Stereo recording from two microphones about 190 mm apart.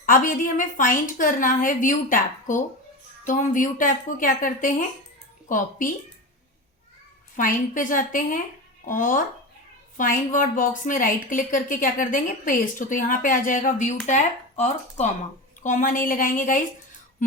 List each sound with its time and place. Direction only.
0.0 s a woman's voice: 45° left (ahead or behind)
7.3 s a woman's voice: 45° left (ahead or behind)